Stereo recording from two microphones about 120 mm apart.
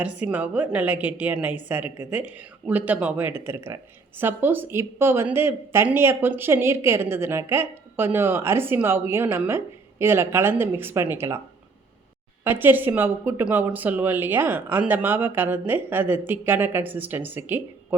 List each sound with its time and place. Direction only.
0.0 s a woman's voice: 10° right (ahead or behind)
12.5 s speech: 15° right (ahead or behind)